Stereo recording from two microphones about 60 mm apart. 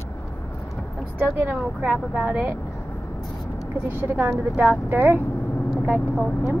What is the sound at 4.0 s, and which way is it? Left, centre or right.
Speech, right.